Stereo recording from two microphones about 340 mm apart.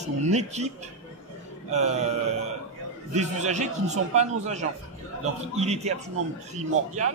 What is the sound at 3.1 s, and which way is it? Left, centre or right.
Speech, centre.